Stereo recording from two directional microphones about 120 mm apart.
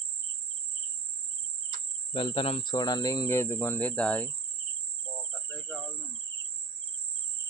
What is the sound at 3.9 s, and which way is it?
Cricket, 10° left (ahead or behind).